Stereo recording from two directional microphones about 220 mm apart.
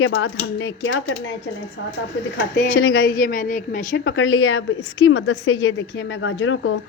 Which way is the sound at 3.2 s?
40° left (ahead or behind).